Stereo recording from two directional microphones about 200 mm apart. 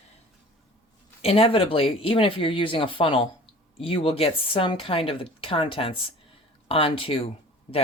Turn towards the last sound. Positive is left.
turn(degrees=25)  # may be behind; listen again after turning